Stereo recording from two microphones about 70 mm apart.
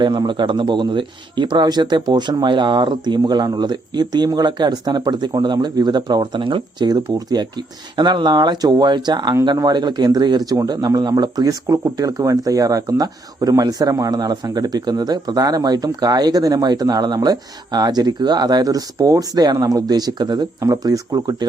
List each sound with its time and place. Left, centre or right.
0.0 s speech: right
9.3 s speech: right
19.0 s speech: right
20.6 s speech: right